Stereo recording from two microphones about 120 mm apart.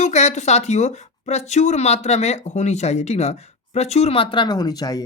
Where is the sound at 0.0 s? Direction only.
70° left (ahead or behind).